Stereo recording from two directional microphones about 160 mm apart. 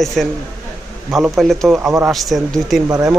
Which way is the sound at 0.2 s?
Centre (ahead or behind).